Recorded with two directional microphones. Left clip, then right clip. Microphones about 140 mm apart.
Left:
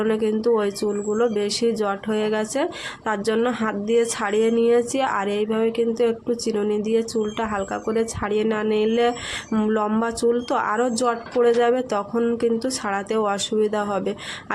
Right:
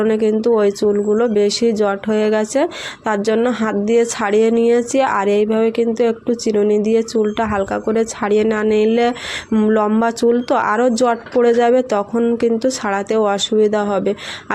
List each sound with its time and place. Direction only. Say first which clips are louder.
0.0 s speech: right 6 dB; 30° right (ahead or behind)